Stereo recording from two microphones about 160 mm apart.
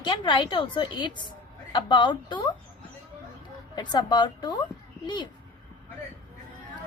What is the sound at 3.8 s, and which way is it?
A woman's voice, 25° left (ahead or behind).